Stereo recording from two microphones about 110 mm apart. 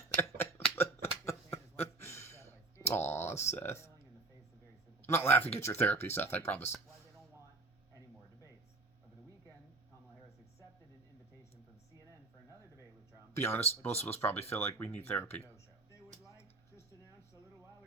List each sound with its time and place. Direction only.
0.2 s a sound: 20° left (ahead or behind)
5.0 s speech: 25° left (ahead or behind)
13.3 s speech: 20° left (ahead or behind)